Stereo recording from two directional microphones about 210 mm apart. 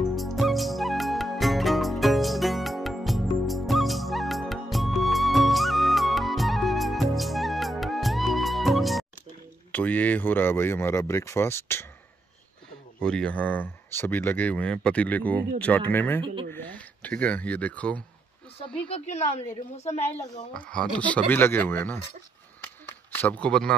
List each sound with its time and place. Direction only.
0.1 s music: centre (ahead or behind)
9.7 s speech: 10° left (ahead or behind)
13.0 s speech: 5° left (ahead or behind)
18.9 s a woman's voice: 30° left (ahead or behind)
20.8 s speech: 5° left (ahead or behind)
22.6 s a sound: 10° left (ahead or behind)